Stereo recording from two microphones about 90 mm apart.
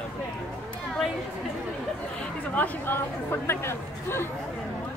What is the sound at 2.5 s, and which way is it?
Speech, 15° left (ahead or behind).